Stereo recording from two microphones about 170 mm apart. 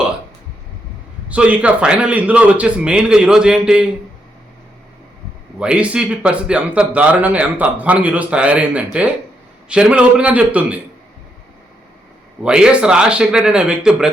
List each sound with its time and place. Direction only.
1.3 s a man's voice: 10° right (ahead or behind)
5.5 s a man's voice: 5° right (ahead or behind)
12.4 s a man's voice: 5° right (ahead or behind)